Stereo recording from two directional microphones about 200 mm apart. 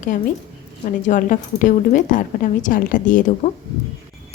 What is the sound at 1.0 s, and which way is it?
A woman's voice, 40° left (ahead or behind).